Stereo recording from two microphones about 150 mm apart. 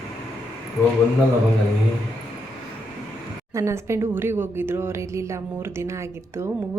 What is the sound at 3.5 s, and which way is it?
A woman's voice, 20° right (ahead or behind).